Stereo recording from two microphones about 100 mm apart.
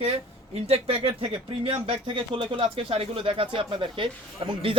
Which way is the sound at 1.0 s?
60° right (ahead or behind).